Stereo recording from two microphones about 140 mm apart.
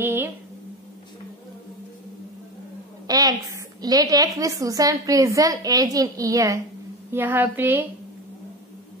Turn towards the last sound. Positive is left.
turn(degrees=-15)  # may be behind; listen again after turning